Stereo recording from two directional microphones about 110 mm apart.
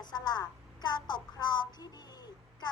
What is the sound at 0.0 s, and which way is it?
Speech, 40° left (ahead or behind).